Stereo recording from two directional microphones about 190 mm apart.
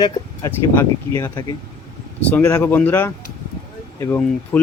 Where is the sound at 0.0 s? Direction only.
15° left (ahead or behind).